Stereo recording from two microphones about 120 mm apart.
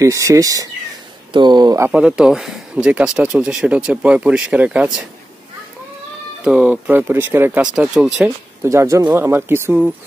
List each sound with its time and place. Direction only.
0.0 s speech: 25° right (ahead or behind)
1.9 s speech: 10° right (ahead or behind)
6.4 s speech: 10° right (ahead or behind)
7.7 s speech: 5° right (ahead or behind)
8.6 s speech: 25° right (ahead or behind)